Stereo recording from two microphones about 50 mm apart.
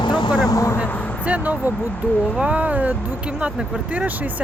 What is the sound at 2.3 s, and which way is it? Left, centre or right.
Speech, right.